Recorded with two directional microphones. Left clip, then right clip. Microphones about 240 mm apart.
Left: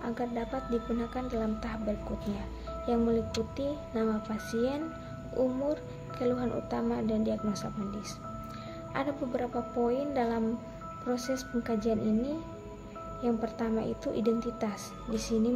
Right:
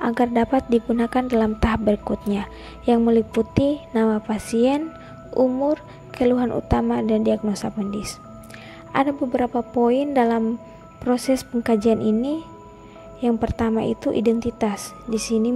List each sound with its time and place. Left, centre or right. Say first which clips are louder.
0.0 s a woman's voice: right 14 dB; right